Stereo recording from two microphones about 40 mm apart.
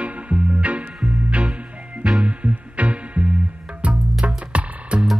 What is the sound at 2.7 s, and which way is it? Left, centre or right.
Music, right.